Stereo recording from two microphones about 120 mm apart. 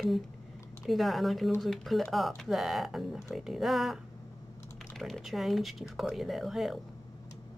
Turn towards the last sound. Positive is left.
turn(degrees=0)  # may be behind; listen again after turning